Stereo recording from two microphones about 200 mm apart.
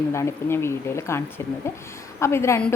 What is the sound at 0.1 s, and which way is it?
Speech, 15° left (ahead or behind).